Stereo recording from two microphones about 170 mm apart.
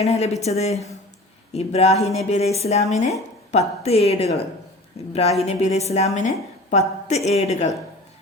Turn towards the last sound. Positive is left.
turn(degrees=40)  # may be behind; listen again after turning